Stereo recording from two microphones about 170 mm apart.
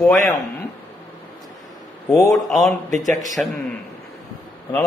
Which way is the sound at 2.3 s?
Centre (ahead or behind).